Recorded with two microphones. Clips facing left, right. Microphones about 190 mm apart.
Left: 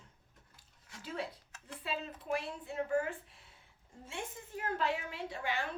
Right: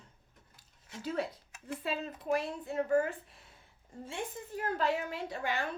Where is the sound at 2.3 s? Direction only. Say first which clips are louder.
Right 5 dB; 40° right (ahead or behind).